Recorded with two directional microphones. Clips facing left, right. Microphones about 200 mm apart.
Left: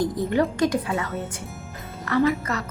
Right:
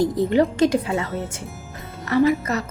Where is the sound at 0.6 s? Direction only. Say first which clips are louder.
Right 4 dB; 25° right (ahead or behind).